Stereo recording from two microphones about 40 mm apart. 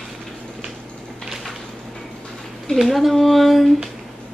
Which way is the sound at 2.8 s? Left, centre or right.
Centre.